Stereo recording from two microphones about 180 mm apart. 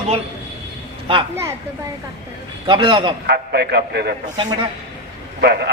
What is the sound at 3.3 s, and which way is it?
Speech, 70° right (ahead or behind).